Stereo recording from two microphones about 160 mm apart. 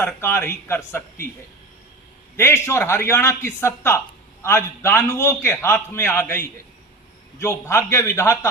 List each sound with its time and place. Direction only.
0.0 s a man's voice: 15° left (ahead or behind)
2.3 s a man's voice: 15° left (ahead or behind)